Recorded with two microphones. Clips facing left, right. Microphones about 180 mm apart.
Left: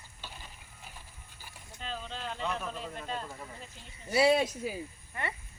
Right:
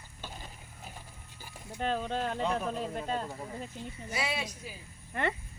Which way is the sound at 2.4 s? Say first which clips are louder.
Right 4 dB; 35° right (ahead or behind).